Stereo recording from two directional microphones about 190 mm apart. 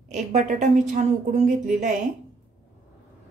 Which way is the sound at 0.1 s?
40° right (ahead or behind).